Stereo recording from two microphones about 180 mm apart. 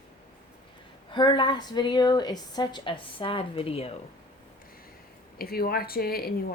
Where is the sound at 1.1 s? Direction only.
25° left (ahead or behind).